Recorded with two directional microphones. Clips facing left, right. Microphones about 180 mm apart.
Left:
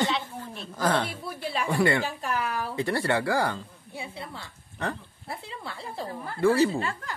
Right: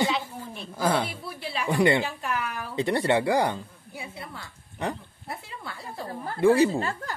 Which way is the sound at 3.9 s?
30° left (ahead or behind).